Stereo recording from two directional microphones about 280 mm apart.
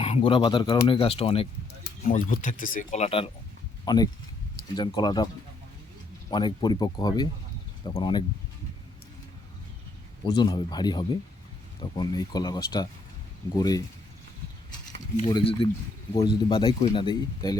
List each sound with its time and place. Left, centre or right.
0.0 s speech: left
6.3 s speech: centre
10.2 s speech: centre
15.3 s speech: centre